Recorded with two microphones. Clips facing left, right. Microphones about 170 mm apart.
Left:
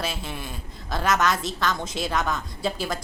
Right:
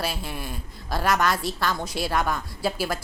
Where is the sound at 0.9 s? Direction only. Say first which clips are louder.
Even; 5° right (ahead or behind).